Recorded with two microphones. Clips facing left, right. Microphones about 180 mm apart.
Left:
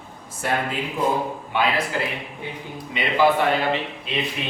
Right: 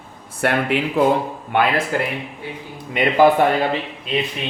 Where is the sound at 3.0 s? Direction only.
50° right (ahead or behind).